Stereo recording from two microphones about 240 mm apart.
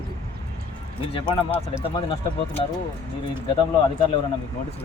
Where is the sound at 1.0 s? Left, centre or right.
Left.